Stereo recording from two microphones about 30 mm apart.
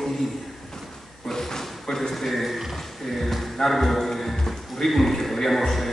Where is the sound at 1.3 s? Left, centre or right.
Centre.